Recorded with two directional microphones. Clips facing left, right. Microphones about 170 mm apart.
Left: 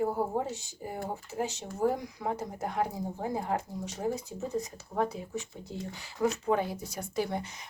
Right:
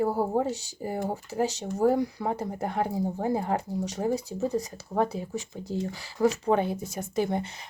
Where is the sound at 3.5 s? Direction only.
35° right (ahead or behind).